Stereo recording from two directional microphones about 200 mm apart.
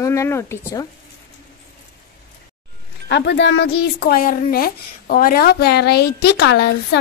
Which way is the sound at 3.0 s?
60° left (ahead or behind).